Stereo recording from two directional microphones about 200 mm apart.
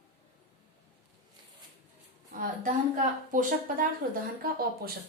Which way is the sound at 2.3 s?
40° right (ahead or behind).